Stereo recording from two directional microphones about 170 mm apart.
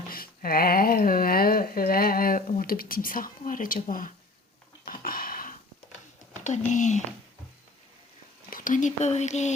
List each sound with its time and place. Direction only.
0.1 s a sound: 60° left (ahead or behind)
6.4 s speech: 45° left (ahead or behind)
8.4 s speech: 55° left (ahead or behind)